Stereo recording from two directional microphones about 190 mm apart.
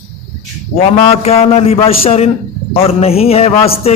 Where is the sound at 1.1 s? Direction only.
30° left (ahead or behind).